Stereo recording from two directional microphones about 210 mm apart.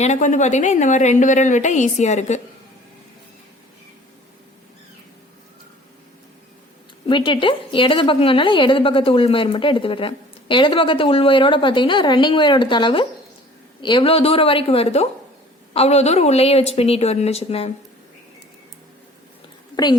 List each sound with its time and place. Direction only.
0.0 s a woman's voice: 35° left (ahead or behind)
7.1 s a woman's voice: 25° left (ahead or behind)
19.7 s speech: 20° left (ahead or behind)